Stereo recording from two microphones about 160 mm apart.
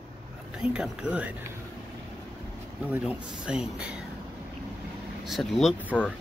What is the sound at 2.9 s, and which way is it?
Speech, 5° right (ahead or behind).